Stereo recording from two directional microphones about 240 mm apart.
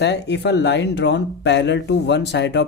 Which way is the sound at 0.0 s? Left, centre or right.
Left.